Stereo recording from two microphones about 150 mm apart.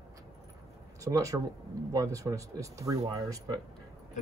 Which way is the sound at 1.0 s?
20° right (ahead or behind).